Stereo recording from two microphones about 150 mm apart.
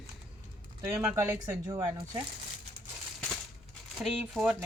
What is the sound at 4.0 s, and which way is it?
Speech, centre (ahead or behind).